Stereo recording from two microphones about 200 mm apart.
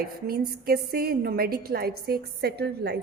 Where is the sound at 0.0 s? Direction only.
50° right (ahead or behind).